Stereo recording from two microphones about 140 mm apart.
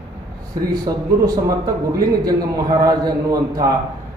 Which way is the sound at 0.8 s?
25° right (ahead or behind).